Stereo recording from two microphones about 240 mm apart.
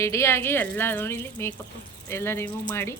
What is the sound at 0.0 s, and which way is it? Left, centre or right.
A woman's voice, centre.